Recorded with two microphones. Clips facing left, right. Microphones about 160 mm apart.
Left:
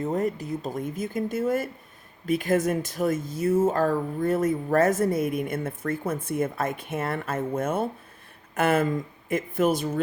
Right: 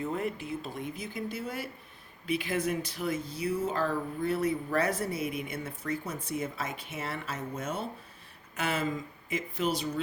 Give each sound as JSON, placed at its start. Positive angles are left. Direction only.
{"t": 0.0, "sound": "speech", "side_deg": 40}